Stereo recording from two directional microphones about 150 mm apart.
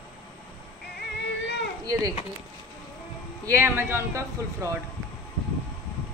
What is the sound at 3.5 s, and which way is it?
Speech, 15° right (ahead or behind).